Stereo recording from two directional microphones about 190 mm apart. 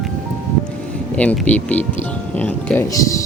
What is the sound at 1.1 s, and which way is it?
Speech, 5° left (ahead or behind).